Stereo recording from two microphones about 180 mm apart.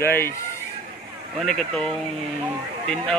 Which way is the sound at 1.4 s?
5° left (ahead or behind).